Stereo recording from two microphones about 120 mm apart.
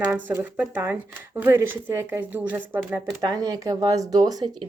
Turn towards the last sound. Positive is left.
turn(degrees=-30)  # may be behind; listen again after turning